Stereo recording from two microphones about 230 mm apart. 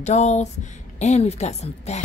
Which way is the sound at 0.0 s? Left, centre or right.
Left.